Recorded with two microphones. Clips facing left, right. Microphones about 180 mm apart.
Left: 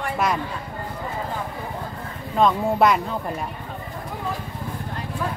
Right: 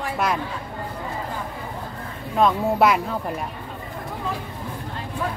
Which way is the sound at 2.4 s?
5° right (ahead or behind).